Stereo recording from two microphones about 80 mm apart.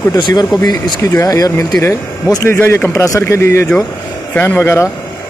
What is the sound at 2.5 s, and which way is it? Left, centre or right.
Speech, left.